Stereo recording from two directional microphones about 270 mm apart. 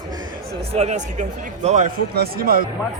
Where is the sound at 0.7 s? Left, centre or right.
Right.